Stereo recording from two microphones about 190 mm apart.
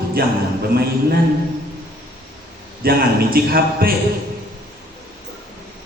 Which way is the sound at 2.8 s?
50° right (ahead or behind).